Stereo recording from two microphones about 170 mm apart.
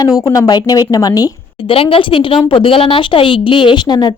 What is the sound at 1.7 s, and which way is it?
A woman's voice, 35° left (ahead or behind).